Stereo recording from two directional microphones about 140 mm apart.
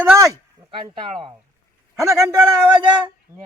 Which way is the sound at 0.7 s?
40° right (ahead or behind).